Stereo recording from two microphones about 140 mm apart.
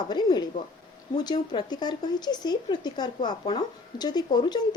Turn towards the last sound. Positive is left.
turn(degrees=30)  # may be behind; listen again after turning